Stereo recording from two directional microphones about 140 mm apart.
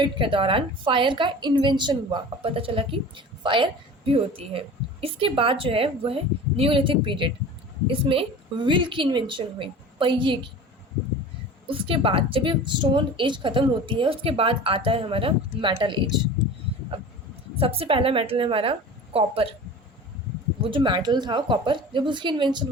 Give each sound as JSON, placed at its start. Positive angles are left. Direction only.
{"t": 0.0, "sound": "a woman's voice", "side_deg": -35}
{"t": 11.7, "sound": "a woman's voice", "side_deg": -40}
{"t": 17.6, "sound": "a woman's voice", "side_deg": -40}
{"t": 20.7, "sound": "a woman's voice", "side_deg": -35}